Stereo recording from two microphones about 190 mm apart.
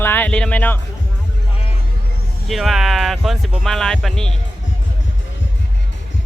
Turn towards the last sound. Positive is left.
turn(degrees=0)  # may be behind; listen again after turning